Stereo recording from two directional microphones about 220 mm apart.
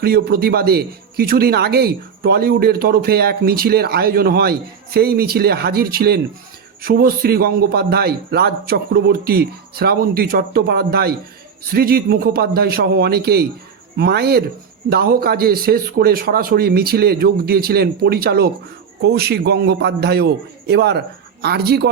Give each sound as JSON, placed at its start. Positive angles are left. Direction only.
{"t": 0.0, "sound": "a man's voice", "side_deg": -45}